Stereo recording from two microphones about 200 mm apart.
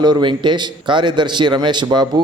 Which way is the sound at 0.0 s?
20° right (ahead or behind).